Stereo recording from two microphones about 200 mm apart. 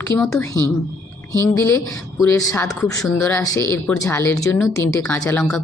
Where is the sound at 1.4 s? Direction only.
15° left (ahead or behind).